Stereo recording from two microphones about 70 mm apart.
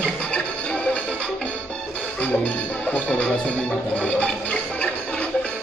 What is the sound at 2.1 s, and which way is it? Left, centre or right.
Music, left.